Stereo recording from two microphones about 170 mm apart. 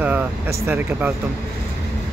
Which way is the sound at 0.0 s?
10° right (ahead or behind).